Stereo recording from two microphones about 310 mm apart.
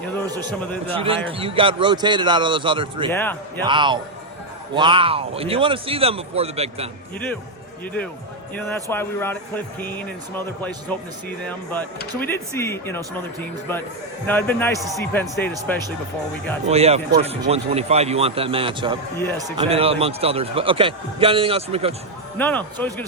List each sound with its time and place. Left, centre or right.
0.9 s a man's voice: centre
3.1 s speech: centre
3.7 s a man's voice: centre
8.5 s speech: centre
14.3 s speech: centre
16.6 s a man's voice: centre
19.1 s speech: centre
19.5 s a man's voice: centre
22.4 s speech: centre